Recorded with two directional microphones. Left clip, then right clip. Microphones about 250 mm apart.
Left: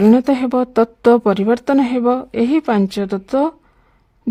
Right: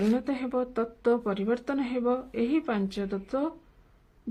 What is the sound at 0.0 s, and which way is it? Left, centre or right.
Speech, left.